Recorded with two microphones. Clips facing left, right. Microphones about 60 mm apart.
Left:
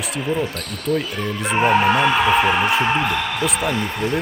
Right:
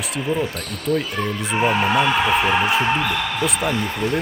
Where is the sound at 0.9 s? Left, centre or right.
Centre.